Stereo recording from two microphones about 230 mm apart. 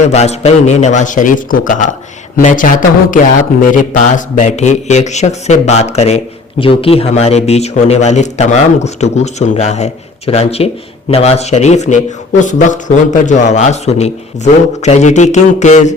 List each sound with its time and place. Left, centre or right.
0.0 s a man's voice: left